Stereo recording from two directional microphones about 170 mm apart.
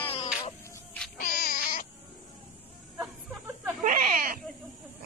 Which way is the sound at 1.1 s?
60° left (ahead or behind).